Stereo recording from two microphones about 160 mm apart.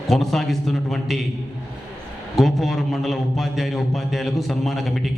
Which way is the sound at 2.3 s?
Centre (ahead or behind).